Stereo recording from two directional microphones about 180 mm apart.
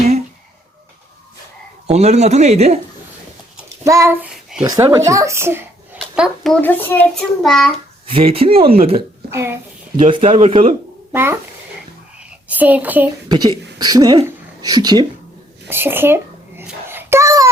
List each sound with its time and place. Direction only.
1.9 s speech: 35° right (ahead or behind)
3.8 s a child's voice: 15° right (ahead or behind)
4.6 s a child's voice: 20° right (ahead or behind)
6.0 s a child's voice: centre (ahead or behind)
8.0 s speech: 30° right (ahead or behind)
9.3 s a child's voice: 15° right (ahead or behind)
10.1 s speech: 30° right (ahead or behind)
11.1 s a child's voice: 10° right (ahead or behind)
12.5 s speech: 10° right (ahead or behind)
13.2 s speech: 25° right (ahead or behind)
15.6 s babbling: 10° right (ahead or behind)